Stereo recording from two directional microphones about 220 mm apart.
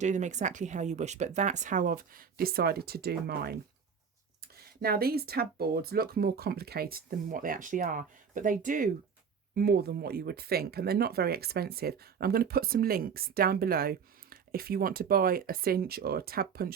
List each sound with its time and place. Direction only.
0.0 s speech: 30° right (ahead or behind)
4.8 s speech: 45° right (ahead or behind)